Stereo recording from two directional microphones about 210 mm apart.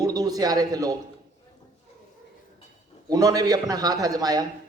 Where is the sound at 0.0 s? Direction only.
15° right (ahead or behind).